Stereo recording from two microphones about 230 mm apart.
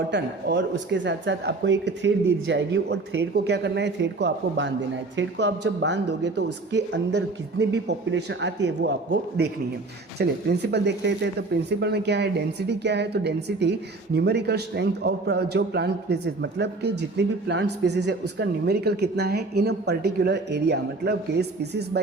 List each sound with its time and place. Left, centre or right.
0.1 s speech: right